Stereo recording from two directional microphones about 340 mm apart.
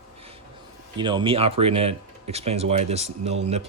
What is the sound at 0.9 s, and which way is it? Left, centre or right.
Speech, centre.